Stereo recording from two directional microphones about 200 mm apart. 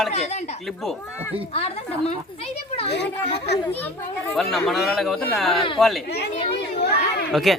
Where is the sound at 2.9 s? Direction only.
55° left (ahead or behind).